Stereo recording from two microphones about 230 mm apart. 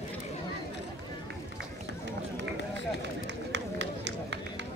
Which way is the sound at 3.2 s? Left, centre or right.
Right.